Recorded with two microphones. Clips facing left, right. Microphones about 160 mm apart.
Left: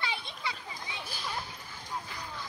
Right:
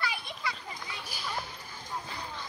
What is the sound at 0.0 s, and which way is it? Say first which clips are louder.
Children playing: right 1 dB; 25° left (ahead or behind).